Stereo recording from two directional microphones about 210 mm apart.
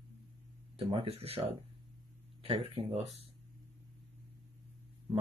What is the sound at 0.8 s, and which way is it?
Speech, 25° right (ahead or behind).